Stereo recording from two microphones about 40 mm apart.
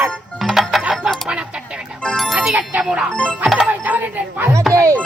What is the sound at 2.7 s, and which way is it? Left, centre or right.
Music, right.